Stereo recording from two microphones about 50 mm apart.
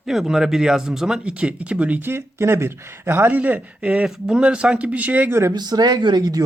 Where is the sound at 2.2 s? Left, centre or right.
Right.